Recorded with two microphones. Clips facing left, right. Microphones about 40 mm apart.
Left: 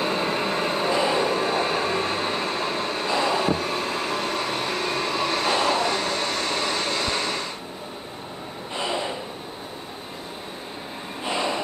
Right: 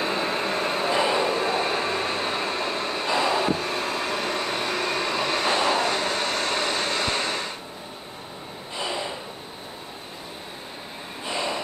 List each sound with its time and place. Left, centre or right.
0.0 s vehicle: centre
0.7 s train: centre
3.5 s vehicle: centre
11.3 s gasp: centre